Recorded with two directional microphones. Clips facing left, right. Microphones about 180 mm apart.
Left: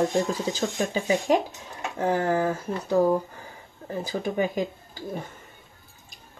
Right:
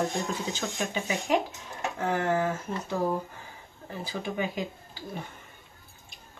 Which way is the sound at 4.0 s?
45° left (ahead or behind).